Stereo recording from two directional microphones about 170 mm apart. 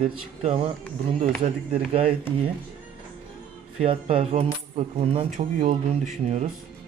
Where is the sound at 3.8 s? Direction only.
35° right (ahead or behind).